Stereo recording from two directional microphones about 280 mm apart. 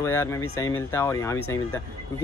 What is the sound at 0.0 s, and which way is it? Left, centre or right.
Speech, centre.